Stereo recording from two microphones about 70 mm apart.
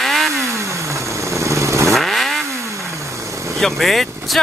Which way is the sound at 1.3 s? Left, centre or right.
Right.